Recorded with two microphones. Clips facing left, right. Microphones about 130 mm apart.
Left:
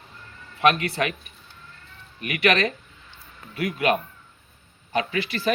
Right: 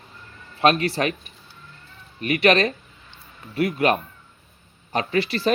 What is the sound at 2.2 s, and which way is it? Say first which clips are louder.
Speech: right 4 dB; 30° right (ahead or behind).